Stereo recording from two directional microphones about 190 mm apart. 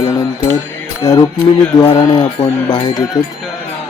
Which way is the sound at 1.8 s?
20° left (ahead or behind).